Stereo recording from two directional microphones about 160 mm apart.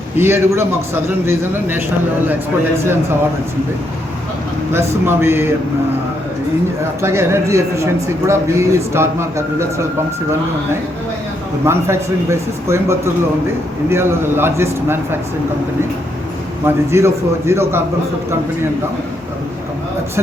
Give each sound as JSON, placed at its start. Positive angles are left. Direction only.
{"t": 0.2, "sound": "speech", "side_deg": -15}
{"t": 4.7, "sound": "speech", "side_deg": -15}
{"t": 7.0, "sound": "speech", "side_deg": -15}
{"t": 11.6, "sound": "speech", "side_deg": -15}
{"t": 16.6, "sound": "speech", "side_deg": -15}